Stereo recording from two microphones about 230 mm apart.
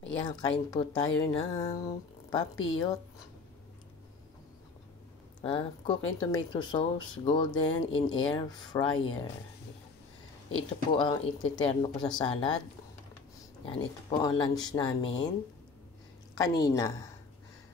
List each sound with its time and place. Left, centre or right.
0.2 s speech: centre
5.4 s speech: left
10.9 s speech: centre
13.7 s speech: centre
16.3 s speech: centre